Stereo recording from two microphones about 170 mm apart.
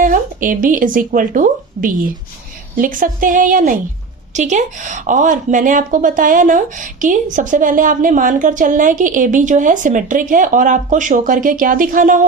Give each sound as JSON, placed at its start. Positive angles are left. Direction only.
{"t": 0.0, "sound": "a woman's voice", "side_deg": -55}